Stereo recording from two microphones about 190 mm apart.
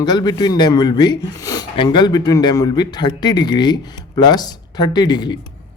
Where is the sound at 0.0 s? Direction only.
20° left (ahead or behind).